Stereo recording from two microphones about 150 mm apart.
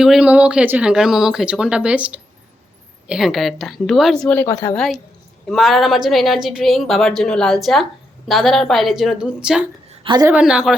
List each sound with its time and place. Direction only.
0.0 s a woman's voice: 5° right (ahead or behind)
4.4 s a woman's voice: 15° left (ahead or behind)
5.5 s a woman's voice: centre (ahead or behind)
9.9 s a sound: 35° right (ahead or behind)
10.2 s a woman's voice: 5° right (ahead or behind)